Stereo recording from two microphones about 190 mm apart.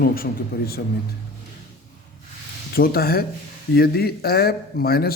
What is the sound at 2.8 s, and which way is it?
A man's voice, 55° left (ahead or behind).